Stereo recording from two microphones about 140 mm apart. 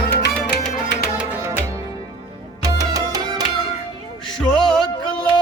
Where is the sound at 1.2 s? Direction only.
15° right (ahead or behind).